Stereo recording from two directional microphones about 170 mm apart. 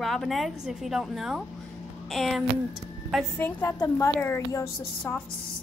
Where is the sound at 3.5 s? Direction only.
10° left (ahead or behind).